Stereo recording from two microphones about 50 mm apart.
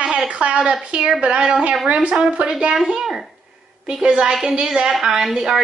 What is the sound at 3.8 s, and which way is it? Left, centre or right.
Speech, centre.